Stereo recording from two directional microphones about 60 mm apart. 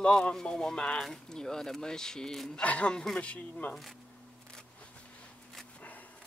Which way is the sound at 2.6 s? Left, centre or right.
Left.